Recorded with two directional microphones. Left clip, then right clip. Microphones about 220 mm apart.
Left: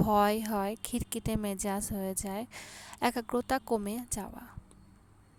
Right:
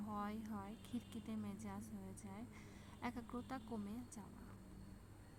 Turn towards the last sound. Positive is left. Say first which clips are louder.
# left 19 dB
turn(degrees=45)  # may be behind; listen again after turning